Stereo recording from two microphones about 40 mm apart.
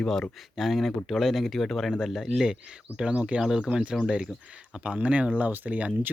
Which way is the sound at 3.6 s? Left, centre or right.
Right.